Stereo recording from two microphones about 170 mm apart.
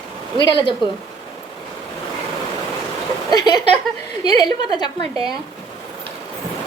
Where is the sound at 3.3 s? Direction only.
25° left (ahead or behind).